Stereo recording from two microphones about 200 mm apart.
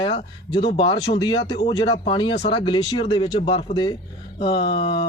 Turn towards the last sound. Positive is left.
turn(degrees=25)  # may be behind; listen again after turning